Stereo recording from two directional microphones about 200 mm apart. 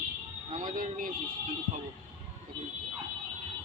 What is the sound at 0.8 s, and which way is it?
Speech, 45° right (ahead or behind).